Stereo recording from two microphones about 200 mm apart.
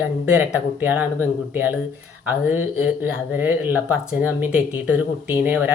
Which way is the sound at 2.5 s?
10° right (ahead or behind).